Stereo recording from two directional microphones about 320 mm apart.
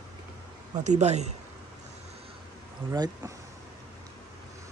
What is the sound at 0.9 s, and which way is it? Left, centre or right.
Speech, right.